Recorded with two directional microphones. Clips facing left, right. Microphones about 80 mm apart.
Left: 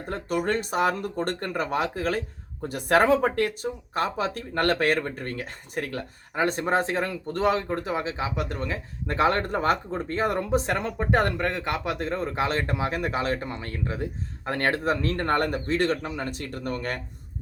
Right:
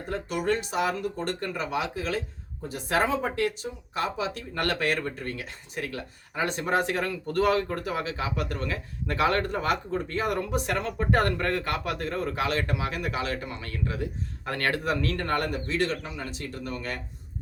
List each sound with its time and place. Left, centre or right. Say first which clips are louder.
0.1 s speech: left 1 dB; left